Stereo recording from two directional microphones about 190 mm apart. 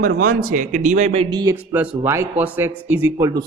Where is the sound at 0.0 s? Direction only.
50° right (ahead or behind); by 1.5 s 20° right (ahead or behind).